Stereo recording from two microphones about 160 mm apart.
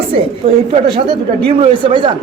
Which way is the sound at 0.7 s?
35° right (ahead or behind).